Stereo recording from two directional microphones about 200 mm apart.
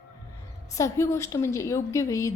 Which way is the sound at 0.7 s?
15° left (ahead or behind).